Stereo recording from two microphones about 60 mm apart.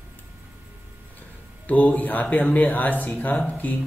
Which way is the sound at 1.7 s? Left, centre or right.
Left.